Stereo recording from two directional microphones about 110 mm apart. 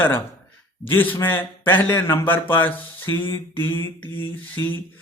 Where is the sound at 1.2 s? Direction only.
20° left (ahead or behind).